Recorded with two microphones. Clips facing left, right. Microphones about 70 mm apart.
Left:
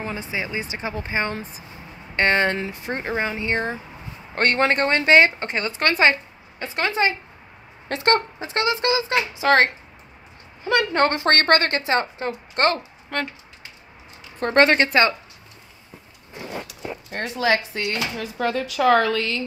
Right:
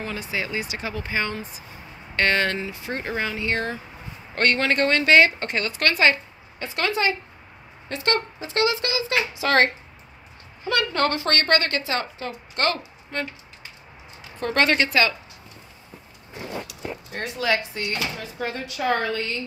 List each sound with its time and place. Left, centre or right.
0.0 s speech: left
1.3 s speech: left
2.1 s speech: left
2.6 s a woman's voice: left
2.9 s speech: left
8.0 s speech: left
10.7 s speech: left
11.1 s a woman's voice: left
13.1 s speech: left
14.4 s speech: left
16.6 s a sound: left
17.7 s speech: left